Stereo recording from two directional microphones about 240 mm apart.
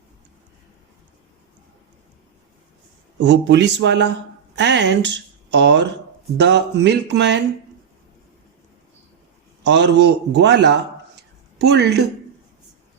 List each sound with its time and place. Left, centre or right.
3.2 s speech: right
9.6 s a man's voice: right